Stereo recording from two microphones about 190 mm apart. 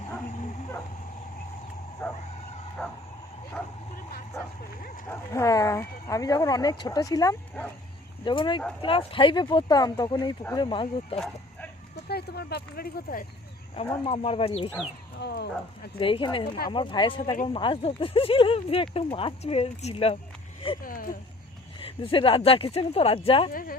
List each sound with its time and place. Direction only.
0.3 s dog: 40° left (ahead or behind)
2.0 s vehicle: 15° left (ahead or behind)
2.8 s bow-wow: 5° left (ahead or behind)
5.0 s speech: 15° left (ahead or behind)
8.2 s speech: 25° left (ahead or behind)
12.0 s speech: 55° left (ahead or behind)
14.0 s speech: 25° left (ahead or behind)
15.2 s speech: 60° left (ahead or behind)
16.0 s speech: 25° left (ahead or behind)
20.8 s speech: 45° left (ahead or behind)
21.8 s speech: 30° left (ahead or behind)
23.5 s speech: 50° left (ahead or behind)